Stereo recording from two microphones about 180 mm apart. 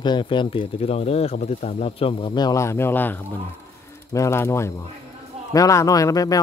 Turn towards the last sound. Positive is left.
turn(degrees=20)  # may be behind; listen again after turning